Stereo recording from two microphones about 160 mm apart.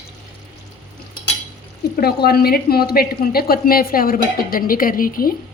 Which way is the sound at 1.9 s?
75° left (ahead or behind).